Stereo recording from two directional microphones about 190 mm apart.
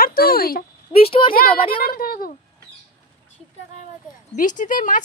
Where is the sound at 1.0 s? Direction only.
30° left (ahead or behind).